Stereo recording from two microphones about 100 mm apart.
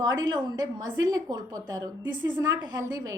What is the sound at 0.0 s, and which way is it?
A woman's voice, 45° right (ahead or behind).